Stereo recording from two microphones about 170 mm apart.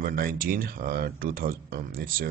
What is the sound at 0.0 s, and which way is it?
Speech, 60° right (ahead or behind).